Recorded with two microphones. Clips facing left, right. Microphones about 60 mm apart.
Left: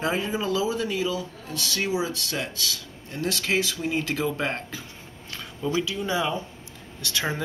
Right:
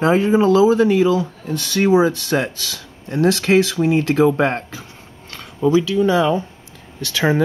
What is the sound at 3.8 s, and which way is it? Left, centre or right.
Speech, right.